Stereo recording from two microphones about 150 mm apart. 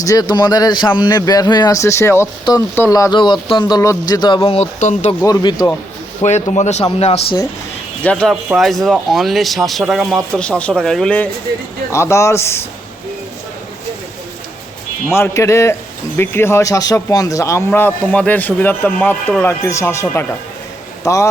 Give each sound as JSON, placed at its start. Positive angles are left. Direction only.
{"t": 0.0, "sound": "a man's voice", "side_deg": 25}
{"t": 4.8, "sound": "speech", "side_deg": 55}
{"t": 5.2, "sound": "a man's voice", "side_deg": 25}
{"t": 6.2, "sound": "a man's voice", "side_deg": 50}
{"t": 8.0, "sound": "a man's voice", "side_deg": 5}
{"t": 11.9, "sound": "a man's voice", "side_deg": 20}
{"t": 15.1, "sound": "a man's voice", "side_deg": 20}